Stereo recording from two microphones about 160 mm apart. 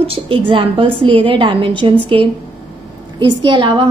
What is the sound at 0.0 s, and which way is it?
A woman's voice, 35° right (ahead or behind).